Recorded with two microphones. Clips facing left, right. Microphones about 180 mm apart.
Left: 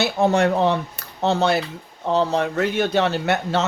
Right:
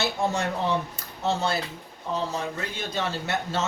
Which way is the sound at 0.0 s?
65° left (ahead or behind).